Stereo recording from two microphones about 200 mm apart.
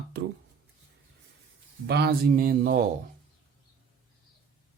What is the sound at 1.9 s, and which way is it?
Speech, 55° right (ahead or behind).